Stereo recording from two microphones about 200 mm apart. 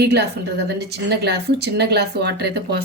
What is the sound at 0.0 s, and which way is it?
Speech, 55° right (ahead or behind).